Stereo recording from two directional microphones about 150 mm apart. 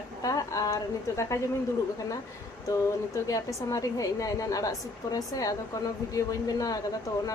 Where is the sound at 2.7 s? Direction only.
20° left (ahead or behind).